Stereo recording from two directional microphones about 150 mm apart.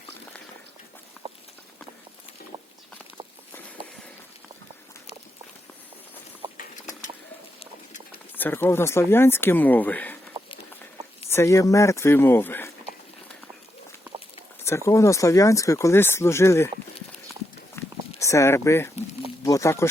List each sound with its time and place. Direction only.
1.2 s clip-clop: 40° right (ahead or behind)
8.4 s speech: 15° left (ahead or behind)
11.3 s speech: 20° left (ahead or behind)
14.8 s speech: 20° left (ahead or behind)
17.8 s a sound: 15° left (ahead or behind)
18.2 s speech: 20° left (ahead or behind)